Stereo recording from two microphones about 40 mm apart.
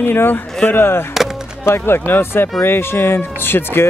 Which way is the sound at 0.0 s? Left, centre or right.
Left.